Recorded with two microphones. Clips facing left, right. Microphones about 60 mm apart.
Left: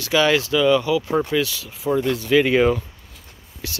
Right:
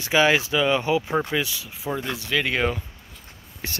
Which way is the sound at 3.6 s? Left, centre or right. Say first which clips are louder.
Even; right.